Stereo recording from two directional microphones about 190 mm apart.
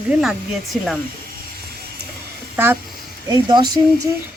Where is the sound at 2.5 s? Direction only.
10° right (ahead or behind).